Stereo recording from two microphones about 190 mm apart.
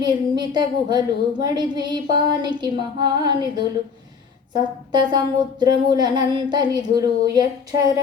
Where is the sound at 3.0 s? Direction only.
20° right (ahead or behind).